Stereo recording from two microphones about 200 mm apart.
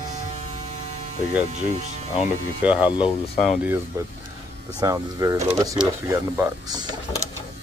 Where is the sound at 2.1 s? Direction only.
5° right (ahead or behind).